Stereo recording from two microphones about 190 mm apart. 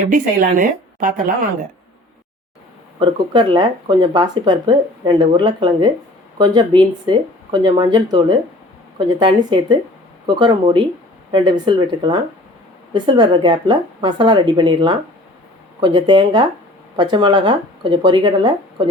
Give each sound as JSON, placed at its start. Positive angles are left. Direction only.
{"t": 0.1, "sound": "a woman's voice", "side_deg": -45}
{"t": 3.0, "sound": "speech", "side_deg": -25}